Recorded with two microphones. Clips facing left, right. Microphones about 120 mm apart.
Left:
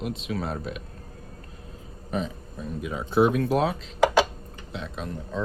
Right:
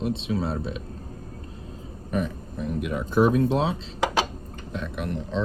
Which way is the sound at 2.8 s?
65° right (ahead or behind).